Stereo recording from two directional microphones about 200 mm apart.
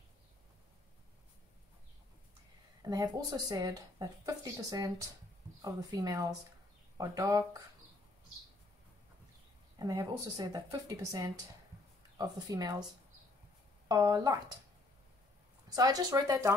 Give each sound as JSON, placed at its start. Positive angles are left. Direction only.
{"t": 2.8, "sound": "speech", "side_deg": -15}
{"t": 9.8, "sound": "speech", "side_deg": -20}
{"t": 13.8, "sound": "speech", "side_deg": -20}
{"t": 15.7, "sound": "speech", "side_deg": -20}